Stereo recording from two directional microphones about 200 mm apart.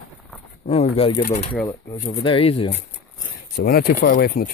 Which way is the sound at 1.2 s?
40° left (ahead or behind).